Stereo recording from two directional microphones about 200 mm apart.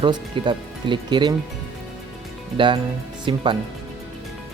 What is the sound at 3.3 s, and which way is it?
Speech, 25° right (ahead or behind).